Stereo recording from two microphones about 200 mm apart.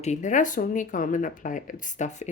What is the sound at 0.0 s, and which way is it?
Speech, 35° left (ahead or behind).